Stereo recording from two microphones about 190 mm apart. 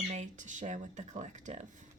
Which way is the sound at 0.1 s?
40° right (ahead or behind).